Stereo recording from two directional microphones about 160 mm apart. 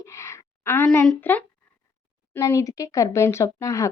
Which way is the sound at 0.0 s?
20° left (ahead or behind).